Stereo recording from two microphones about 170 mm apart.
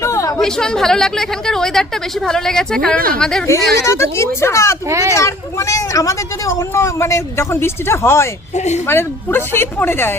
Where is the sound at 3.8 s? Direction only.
15° left (ahead or behind).